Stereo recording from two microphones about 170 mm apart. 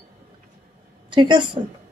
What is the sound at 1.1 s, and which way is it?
Speech, 25° right (ahead or behind).